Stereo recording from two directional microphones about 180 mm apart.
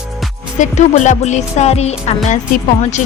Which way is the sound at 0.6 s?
40° left (ahead or behind).